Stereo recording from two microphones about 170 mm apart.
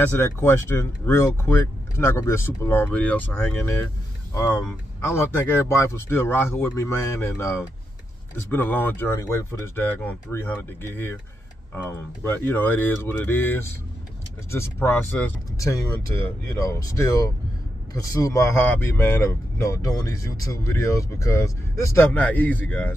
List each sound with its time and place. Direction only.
0.1 s speech: 15° left (ahead or behind)